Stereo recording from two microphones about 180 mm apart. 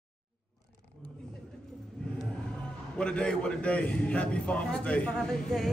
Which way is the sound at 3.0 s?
5° left (ahead or behind).